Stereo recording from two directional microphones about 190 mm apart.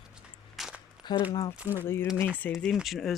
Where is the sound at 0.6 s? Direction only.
Centre (ahead or behind).